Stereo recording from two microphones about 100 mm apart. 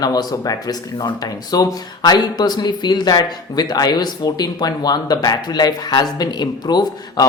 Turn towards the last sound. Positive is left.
turn(degrees=45)  # may be behind; listen again after turning